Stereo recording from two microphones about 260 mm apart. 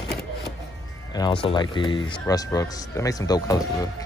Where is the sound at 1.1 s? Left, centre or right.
Centre.